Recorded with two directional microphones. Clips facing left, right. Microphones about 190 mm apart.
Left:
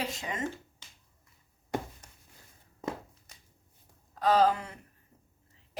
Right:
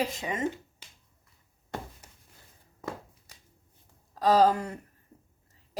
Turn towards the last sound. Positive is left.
turn(degrees=-40)  # may be behind; listen again after turning